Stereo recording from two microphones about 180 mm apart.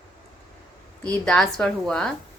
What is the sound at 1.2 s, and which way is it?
Speech, 5° left (ahead or behind).